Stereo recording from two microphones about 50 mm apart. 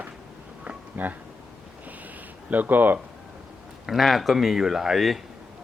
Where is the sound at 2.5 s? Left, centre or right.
Right.